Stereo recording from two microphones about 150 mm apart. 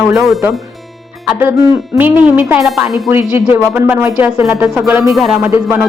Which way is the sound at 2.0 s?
10° right (ahead or behind).